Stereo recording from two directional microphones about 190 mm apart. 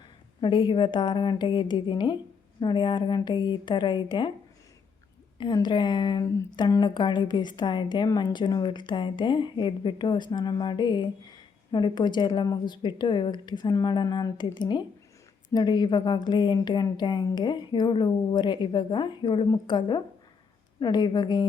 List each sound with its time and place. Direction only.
0.4 s speech: 25° left (ahead or behind)
5.4 s speech: 25° left (ahead or behind)